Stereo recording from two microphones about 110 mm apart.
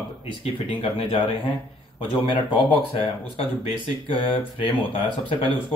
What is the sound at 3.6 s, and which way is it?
Speech, 55° left (ahead or behind).